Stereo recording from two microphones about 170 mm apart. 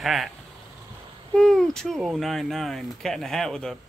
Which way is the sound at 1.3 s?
5° left (ahead or behind).